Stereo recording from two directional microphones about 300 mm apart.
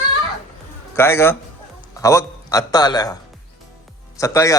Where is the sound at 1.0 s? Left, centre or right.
Centre.